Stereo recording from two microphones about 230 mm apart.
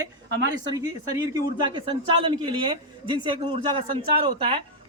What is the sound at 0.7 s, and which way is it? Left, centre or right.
Speech, centre.